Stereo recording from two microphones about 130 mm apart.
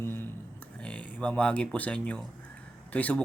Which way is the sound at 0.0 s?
15° left (ahead or behind).